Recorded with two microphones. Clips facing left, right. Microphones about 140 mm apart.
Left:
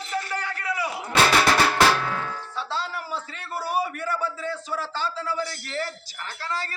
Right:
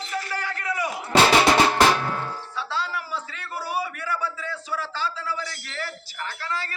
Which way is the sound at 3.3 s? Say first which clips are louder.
Left 3 dB; 45° left (ahead or behind).